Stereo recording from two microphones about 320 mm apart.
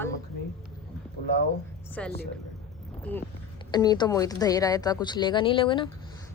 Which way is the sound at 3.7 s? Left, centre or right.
Centre.